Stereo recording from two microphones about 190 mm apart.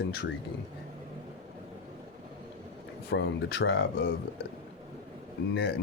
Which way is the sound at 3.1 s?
65° left (ahead or behind).